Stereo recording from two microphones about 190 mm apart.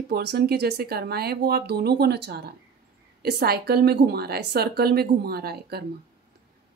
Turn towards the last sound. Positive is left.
turn(degrees=-55)  # may be behind; listen again after turning